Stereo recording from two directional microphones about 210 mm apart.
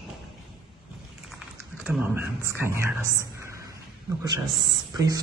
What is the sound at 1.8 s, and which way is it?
Speech, 5° right (ahead or behind).